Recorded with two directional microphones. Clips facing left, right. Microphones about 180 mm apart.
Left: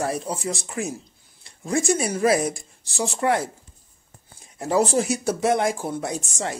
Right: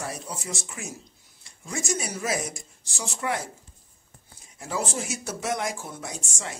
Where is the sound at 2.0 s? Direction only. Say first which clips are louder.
Left 9 dB; 55° left (ahead or behind).